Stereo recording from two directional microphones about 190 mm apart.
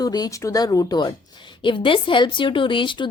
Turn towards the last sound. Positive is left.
turn(degrees=25)  # may be behind; listen again after turning